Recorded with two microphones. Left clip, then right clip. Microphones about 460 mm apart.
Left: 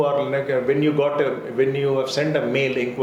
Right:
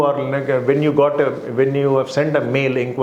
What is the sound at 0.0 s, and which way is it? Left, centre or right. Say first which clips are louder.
Speech: right 2 dB; right.